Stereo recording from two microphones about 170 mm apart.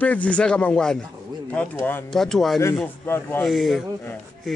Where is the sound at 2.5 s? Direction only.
15° left (ahead or behind).